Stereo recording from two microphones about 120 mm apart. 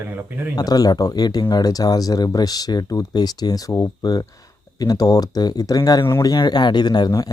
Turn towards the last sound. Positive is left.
turn(degrees=35)  # may be behind; listen again after turning